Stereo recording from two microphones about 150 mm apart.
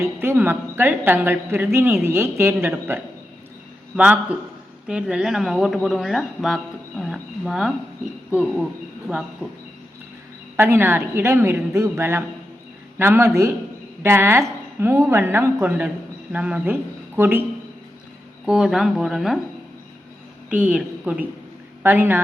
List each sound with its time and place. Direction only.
0.2 s a woman's voice: 15° right (ahead or behind)
10.6 s a woman's voice: 15° right (ahead or behind)
18.4 s speech: 5° right (ahead or behind)
20.5 s a woman's voice: 10° right (ahead or behind)